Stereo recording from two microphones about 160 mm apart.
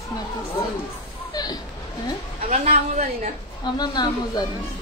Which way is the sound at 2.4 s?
40° right (ahead or behind).